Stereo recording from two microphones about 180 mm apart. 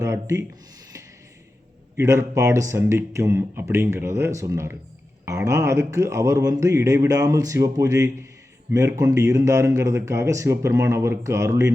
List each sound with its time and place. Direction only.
0.0 s speech: 15° right (ahead or behind)
2.0 s speech: 15° right (ahead or behind)